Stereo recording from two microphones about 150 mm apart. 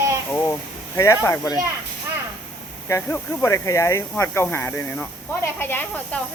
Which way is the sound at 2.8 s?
15° left (ahead or behind).